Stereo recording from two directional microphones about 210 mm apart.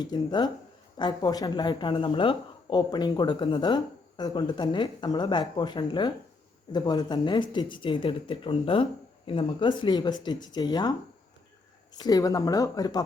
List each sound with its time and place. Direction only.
0.0 s speech: 20° left (ahead or behind)
11.9 s speech: 20° left (ahead or behind)